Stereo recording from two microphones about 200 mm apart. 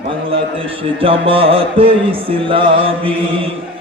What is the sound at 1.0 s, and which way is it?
Chant, 25° right (ahead or behind).